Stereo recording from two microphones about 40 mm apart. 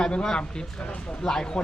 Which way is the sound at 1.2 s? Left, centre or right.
Centre.